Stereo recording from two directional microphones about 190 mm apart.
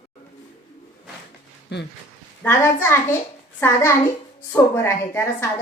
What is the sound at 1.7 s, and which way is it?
Speech, 65° left (ahead or behind).